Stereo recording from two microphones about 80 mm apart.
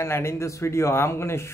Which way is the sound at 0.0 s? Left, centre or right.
Left.